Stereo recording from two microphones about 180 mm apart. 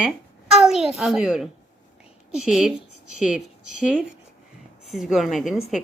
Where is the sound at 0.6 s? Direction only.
Centre (ahead or behind).